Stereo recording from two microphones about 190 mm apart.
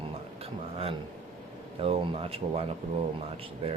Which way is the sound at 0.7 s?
30° right (ahead or behind).